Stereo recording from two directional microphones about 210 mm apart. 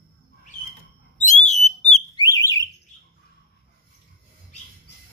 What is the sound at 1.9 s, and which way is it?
Alarm, 20° left (ahead or behind).